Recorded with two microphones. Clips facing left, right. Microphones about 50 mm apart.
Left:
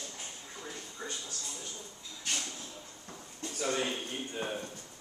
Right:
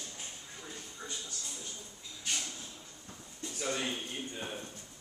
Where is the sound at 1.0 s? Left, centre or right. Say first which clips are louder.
Left 4 dB; left.